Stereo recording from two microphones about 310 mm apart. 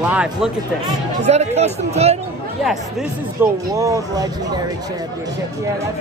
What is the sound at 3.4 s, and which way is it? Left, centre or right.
Speech, centre.